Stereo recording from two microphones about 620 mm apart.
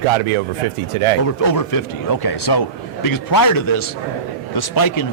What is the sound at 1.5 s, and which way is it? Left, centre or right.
A man's voice, left.